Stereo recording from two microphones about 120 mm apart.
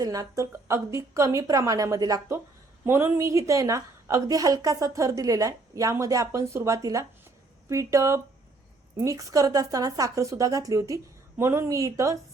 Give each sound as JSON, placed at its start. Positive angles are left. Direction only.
{"t": 0.0, "sound": "a woman's voice", "side_deg": -30}
{"t": 2.8, "sound": "a woman's voice", "side_deg": -20}